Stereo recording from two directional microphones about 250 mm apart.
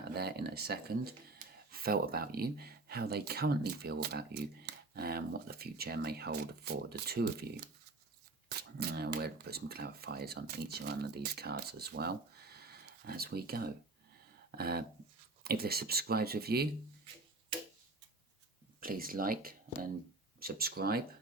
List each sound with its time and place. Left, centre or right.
0.0 s speech: right
18.8 s speech: right